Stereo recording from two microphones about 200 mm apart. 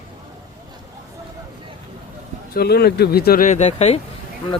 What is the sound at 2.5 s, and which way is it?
Speech, 55° left (ahead or behind).